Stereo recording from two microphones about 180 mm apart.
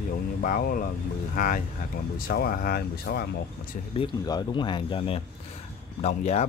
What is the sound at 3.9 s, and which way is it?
Speech, 25° left (ahead or behind).